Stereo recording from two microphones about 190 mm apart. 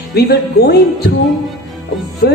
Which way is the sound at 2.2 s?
55° left (ahead or behind).